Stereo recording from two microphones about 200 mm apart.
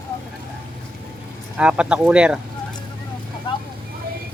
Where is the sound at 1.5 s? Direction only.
5° right (ahead or behind).